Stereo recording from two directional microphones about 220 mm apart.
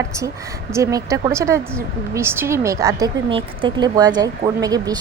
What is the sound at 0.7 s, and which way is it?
A woman's voice, 15° right (ahead or behind).